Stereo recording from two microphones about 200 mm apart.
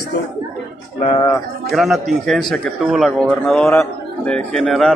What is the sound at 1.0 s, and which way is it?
Speech, 20° left (ahead or behind).